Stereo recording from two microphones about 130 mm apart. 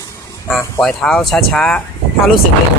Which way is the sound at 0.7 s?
5° left (ahead or behind).